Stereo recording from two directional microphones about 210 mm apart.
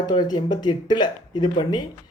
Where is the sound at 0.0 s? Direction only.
20° left (ahead or behind).